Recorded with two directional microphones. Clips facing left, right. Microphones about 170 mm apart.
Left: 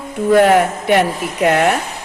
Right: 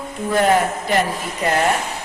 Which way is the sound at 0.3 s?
65° left (ahead or behind).